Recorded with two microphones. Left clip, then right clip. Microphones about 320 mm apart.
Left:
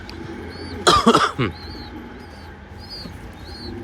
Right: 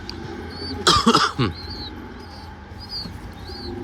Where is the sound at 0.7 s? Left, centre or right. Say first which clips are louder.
Left 2 dB; centre.